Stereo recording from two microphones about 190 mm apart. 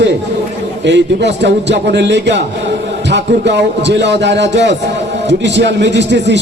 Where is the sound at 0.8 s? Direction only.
65° right (ahead or behind).